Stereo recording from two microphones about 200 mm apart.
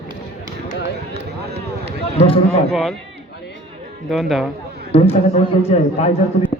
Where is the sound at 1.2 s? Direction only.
55° right (ahead or behind).